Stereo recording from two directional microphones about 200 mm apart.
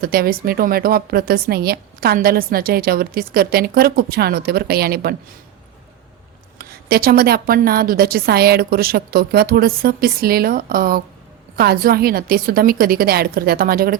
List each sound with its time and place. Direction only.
0.0 s a woman's voice: 50° right (ahead or behind)
6.6 s a woman's voice: 50° right (ahead or behind)